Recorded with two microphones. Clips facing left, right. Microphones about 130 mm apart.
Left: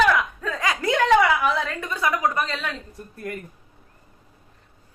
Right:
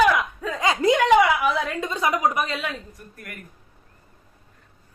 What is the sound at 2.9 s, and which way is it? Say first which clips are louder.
Speech: left 8 dB; 30° left (ahead or behind).